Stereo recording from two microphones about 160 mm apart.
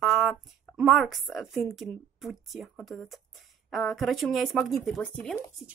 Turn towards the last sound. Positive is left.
turn(degrees=5)  # may be behind; listen again after turning